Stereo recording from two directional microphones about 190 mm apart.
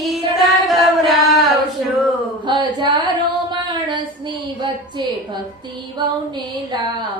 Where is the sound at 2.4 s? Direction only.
25° right (ahead or behind).